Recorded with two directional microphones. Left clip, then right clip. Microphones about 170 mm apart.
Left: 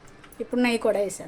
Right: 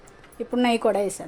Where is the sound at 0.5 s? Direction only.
10° right (ahead or behind).